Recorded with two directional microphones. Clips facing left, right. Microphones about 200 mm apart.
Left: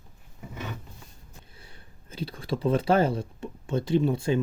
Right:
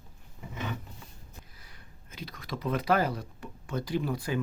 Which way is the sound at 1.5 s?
30° left (ahead or behind).